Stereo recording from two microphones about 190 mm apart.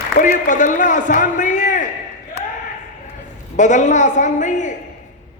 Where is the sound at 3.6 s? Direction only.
40° left (ahead or behind).